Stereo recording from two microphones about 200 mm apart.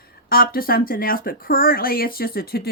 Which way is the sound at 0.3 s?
50° left (ahead or behind).